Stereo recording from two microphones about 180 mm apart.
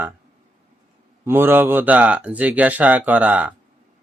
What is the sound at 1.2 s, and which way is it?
Speech, 15° right (ahead or behind).